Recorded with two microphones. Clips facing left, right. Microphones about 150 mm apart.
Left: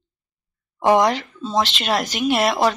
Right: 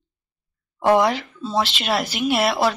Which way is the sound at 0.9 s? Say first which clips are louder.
Left 1 dB; 5° right (ahead or behind).